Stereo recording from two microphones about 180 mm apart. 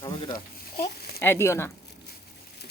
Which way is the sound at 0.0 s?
25° left (ahead or behind).